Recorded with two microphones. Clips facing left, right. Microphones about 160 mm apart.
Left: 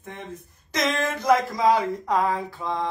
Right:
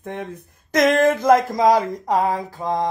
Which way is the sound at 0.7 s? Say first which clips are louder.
Right 9 dB; 55° right (ahead or behind).